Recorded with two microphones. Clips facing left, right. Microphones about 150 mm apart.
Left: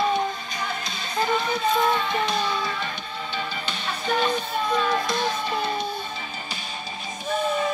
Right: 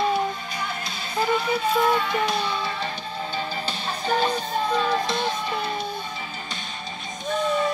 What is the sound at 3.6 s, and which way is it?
Music, 35° right (ahead or behind).